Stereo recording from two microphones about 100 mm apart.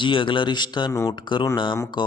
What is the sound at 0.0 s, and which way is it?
Speech, 55° left (ahead or behind).